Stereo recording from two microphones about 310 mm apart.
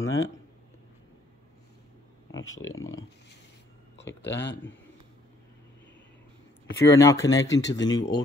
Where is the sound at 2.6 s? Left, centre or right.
Left.